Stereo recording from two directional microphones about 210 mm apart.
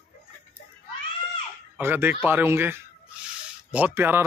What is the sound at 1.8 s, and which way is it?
Speech, 10° right (ahead or behind).